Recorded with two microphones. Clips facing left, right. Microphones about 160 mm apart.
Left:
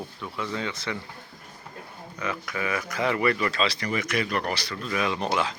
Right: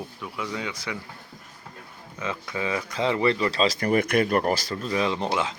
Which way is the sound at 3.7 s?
50° right (ahead or behind).